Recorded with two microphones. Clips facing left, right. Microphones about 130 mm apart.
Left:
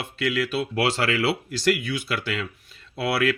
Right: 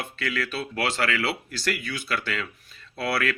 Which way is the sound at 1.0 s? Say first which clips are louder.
Left 3 dB; 25° left (ahead or behind).